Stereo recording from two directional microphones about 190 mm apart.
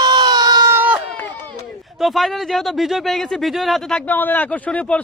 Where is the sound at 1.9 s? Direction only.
Centre (ahead or behind).